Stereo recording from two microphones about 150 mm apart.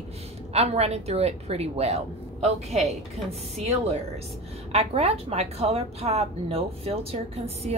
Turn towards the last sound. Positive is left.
turn(degrees=-45)  # may be behind; listen again after turning